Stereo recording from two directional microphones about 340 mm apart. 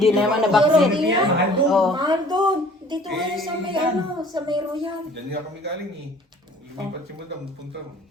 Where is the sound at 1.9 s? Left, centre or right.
Centre.